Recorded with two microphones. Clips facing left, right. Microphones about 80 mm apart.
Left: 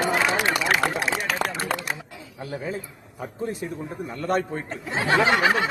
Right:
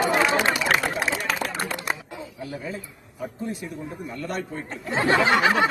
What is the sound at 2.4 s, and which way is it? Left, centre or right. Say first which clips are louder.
A man's voice: left 4 dB; left.